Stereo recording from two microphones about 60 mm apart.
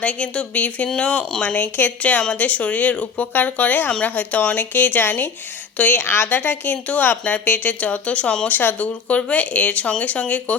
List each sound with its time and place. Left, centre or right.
0.0 s speech: centre
6.0 s a woman's voice: left
6.2 s a woman's voice: left